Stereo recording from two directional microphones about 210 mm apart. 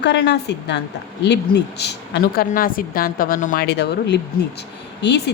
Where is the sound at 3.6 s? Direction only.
50° left (ahead or behind).